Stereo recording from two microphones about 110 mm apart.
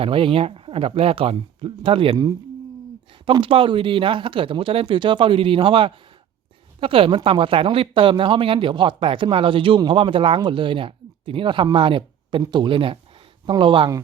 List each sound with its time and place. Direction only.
0.0 s speech: 55° right (ahead or behind)
3.2 s speech: 50° right (ahead or behind)